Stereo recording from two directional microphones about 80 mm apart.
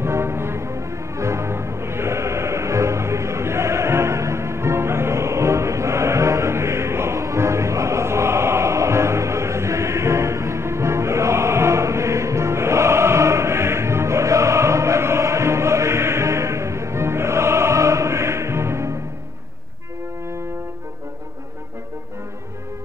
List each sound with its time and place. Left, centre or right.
0.0 s music: right